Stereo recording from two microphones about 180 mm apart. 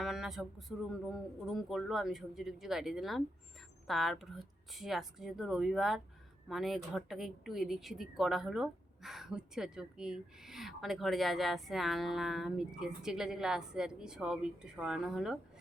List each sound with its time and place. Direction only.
0.0 s speech: centre (ahead or behind)